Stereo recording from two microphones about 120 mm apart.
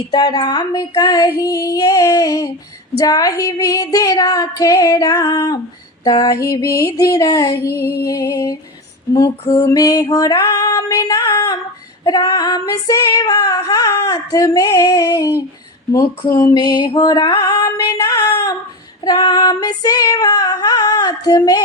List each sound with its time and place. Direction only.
0.1 s music: 35° left (ahead or behind)
1.4 s female singing: 30° left (ahead or behind)
15.9 s music: 30° left (ahead or behind)